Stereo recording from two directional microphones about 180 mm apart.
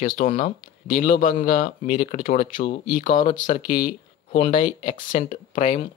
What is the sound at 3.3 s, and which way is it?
Speech, 45° left (ahead or behind).